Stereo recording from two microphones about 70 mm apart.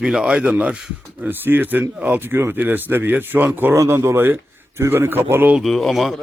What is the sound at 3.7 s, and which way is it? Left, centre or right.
A man's voice, right.